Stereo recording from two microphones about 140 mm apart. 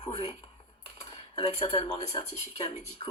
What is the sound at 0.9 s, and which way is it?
Dishes, 45° left (ahead or behind).